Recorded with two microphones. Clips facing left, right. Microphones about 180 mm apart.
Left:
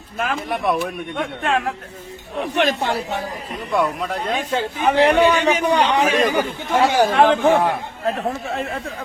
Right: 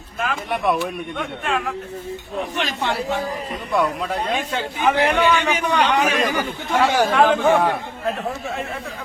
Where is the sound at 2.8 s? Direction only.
40° left (ahead or behind).